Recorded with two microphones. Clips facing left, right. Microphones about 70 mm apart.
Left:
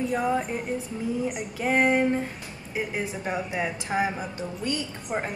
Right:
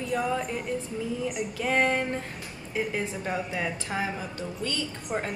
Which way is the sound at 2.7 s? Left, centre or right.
Centre.